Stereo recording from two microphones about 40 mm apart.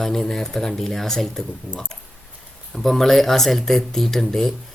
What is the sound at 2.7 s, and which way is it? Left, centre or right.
Speech, centre.